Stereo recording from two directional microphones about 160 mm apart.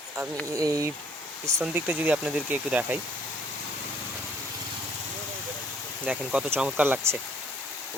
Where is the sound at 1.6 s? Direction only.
10° right (ahead or behind).